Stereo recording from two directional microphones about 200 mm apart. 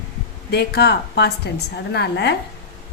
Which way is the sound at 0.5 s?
55° left (ahead or behind).